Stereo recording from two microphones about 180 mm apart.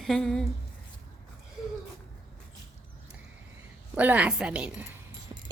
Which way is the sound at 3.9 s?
10° right (ahead or behind).